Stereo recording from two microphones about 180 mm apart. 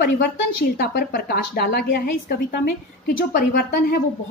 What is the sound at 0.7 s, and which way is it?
A woman's voice, 55° left (ahead or behind).